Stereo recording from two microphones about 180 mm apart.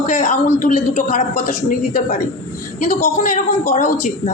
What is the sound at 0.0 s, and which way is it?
A man's voice, 45° left (ahead or behind).